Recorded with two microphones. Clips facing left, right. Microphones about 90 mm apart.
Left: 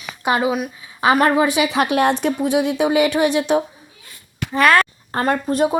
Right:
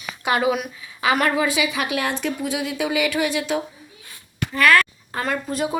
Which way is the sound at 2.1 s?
60° left (ahead or behind).